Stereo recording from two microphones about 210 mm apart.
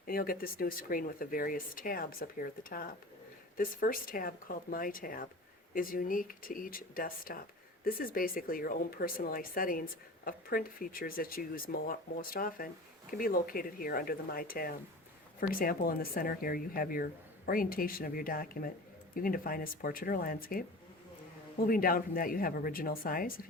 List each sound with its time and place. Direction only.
0.1 s speech: 45° left (ahead or behind)